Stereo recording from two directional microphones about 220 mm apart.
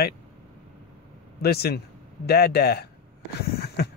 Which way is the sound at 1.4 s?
45° left (ahead or behind).